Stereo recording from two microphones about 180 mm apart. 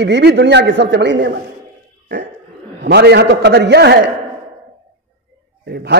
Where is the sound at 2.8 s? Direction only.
65° right (ahead or behind).